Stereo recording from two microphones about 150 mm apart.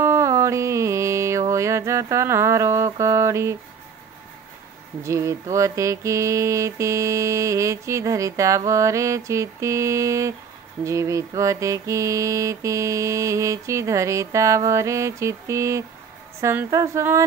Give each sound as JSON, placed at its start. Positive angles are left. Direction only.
{"t": 0.0, "sound": "mantra", "side_deg": -20}
{"t": 5.0, "sound": "mantra", "side_deg": -20}